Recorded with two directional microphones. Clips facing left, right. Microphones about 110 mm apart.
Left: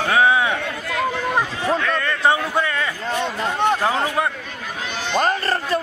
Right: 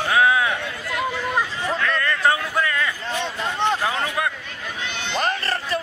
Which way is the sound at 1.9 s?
20° left (ahead or behind).